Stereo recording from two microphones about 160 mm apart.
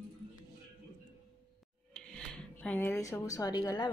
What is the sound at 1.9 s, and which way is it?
Speech, 5° left (ahead or behind).